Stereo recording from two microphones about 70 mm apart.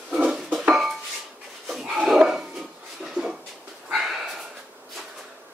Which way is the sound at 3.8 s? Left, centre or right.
Centre.